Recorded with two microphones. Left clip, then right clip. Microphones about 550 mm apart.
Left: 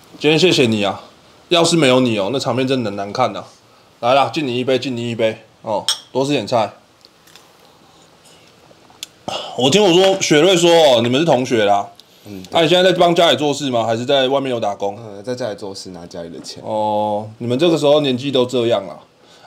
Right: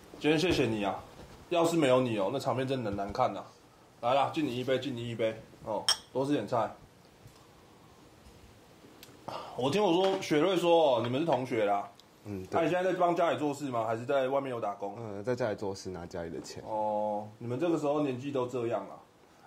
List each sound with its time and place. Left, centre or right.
0.2 s a man's voice: left
9.2 s a man's voice: left
12.5 s a man's voice: left
15.2 s speech: centre
17.6 s speech: left